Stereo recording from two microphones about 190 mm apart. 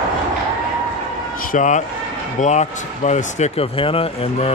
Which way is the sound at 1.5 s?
40° left (ahead or behind).